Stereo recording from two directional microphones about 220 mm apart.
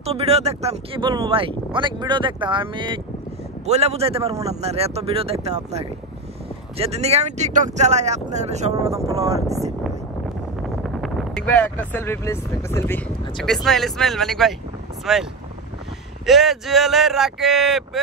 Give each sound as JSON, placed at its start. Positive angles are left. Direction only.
{"t": 0.0, "sound": "speech", "side_deg": -25}
{"t": 10.6, "sound": "speech", "side_deg": 0}
{"t": 16.3, "sound": "speech", "side_deg": 0}